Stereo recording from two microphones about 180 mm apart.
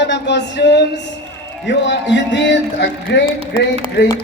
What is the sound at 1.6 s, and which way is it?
Speech, 80° left.